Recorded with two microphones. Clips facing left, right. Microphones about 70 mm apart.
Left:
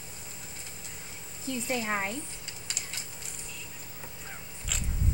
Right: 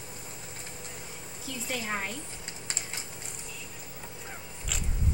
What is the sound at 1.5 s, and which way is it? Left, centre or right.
Speech, left.